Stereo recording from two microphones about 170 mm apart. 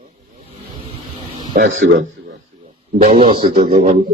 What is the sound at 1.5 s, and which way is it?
Speech, 50° right (ahead or behind).